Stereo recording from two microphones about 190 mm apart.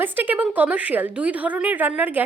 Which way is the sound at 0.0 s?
10° right (ahead or behind).